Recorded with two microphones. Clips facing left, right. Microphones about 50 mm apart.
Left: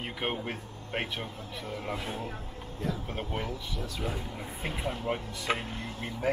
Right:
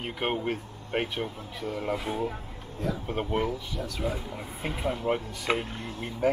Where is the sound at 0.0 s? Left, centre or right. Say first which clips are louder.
Right 4 dB; centre.